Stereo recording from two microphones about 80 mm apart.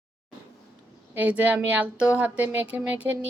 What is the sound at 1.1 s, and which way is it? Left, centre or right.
Speech, right.